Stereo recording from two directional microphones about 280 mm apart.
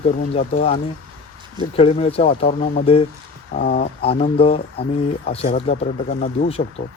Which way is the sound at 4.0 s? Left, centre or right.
Left.